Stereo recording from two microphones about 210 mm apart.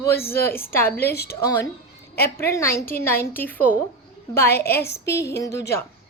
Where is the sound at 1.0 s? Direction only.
50° left (ahead or behind).